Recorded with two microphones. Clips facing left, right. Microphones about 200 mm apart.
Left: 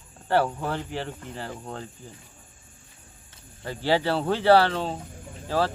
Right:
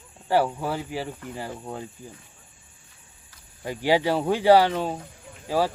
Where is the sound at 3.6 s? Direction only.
15° right (ahead or behind).